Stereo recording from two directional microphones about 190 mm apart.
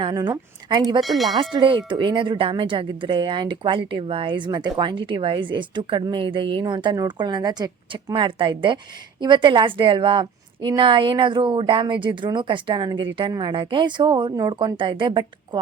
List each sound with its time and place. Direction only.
0.0 s speech: 20° right (ahead or behind)
1.0 s speech: centre (ahead or behind)
1.5 s a woman's voice: 25° right (ahead or behind)